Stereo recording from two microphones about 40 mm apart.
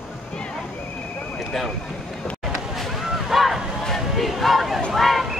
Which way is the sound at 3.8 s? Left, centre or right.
Centre.